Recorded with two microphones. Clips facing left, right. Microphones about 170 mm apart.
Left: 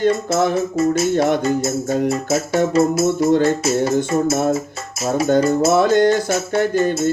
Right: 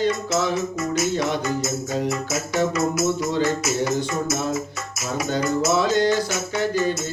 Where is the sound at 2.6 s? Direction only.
50° left (ahead or behind).